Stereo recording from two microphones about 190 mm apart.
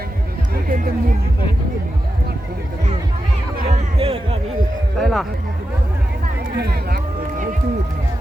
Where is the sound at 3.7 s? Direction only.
30° right (ahead or behind).